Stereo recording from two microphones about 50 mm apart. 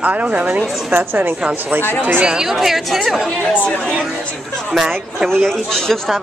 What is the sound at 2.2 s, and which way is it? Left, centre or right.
Speech, centre.